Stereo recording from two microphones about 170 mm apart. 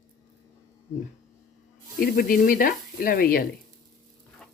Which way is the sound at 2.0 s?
60° left (ahead or behind).